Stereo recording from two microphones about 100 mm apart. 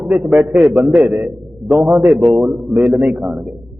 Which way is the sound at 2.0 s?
15° right (ahead or behind).